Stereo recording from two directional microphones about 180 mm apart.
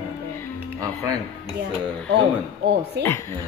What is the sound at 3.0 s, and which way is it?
Speech, 70° right (ahead or behind).